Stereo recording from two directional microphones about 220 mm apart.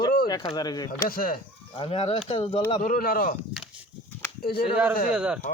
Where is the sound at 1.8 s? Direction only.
25° left (ahead or behind).